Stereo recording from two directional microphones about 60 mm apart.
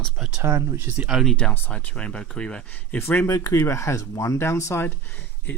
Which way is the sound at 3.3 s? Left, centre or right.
Left.